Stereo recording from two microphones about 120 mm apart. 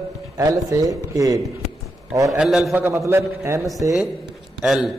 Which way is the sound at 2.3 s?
5° right (ahead or behind).